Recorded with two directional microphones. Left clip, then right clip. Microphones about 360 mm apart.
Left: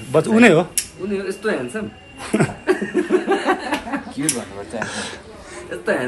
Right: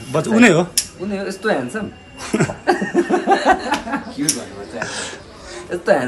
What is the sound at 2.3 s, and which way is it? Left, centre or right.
Speech, centre.